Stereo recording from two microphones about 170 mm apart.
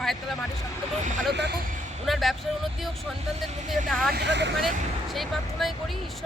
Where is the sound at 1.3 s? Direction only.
85° right.